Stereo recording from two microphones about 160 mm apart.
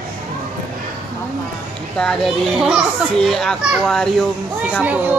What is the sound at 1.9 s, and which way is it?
A child's voice, 5° left (ahead or behind).